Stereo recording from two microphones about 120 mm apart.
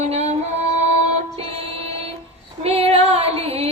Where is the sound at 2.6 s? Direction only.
55° right (ahead or behind).